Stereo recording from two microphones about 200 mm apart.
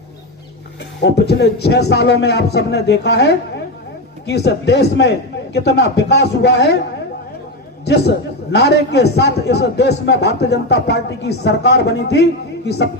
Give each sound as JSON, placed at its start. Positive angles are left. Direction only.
{"t": 1.0, "sound": "a man's voice", "side_deg": 55}
{"t": 7.9, "sound": "a man's voice", "side_deg": 55}